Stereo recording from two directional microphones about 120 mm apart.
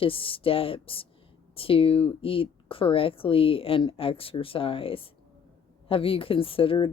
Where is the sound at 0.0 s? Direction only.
50° left (ahead or behind).